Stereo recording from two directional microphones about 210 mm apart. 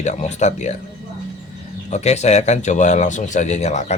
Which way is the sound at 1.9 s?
30° left (ahead or behind).